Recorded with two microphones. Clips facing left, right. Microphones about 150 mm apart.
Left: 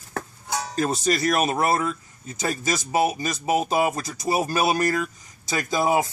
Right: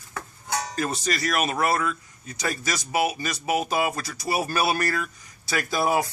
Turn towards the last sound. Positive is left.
turn(degrees=20)  # may be behind; listen again after turning